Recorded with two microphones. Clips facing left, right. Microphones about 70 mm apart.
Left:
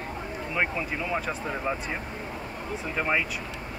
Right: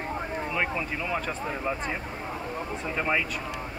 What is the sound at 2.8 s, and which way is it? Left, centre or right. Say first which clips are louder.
Speech: left 1 dB; centre.